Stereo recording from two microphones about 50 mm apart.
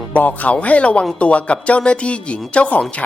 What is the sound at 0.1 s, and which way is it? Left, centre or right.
Speech, left.